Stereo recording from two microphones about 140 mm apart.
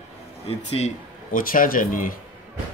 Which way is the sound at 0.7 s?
55° left (ahead or behind).